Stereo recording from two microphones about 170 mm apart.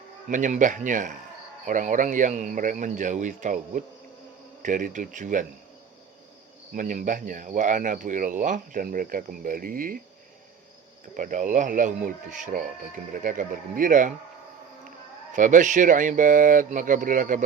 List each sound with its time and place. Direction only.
0.3 s speech: 45° right (ahead or behind)
6.7 s speech: 50° right (ahead or behind)
11.1 s speech: 50° right (ahead or behind)
15.3 s speech: 50° right (ahead or behind)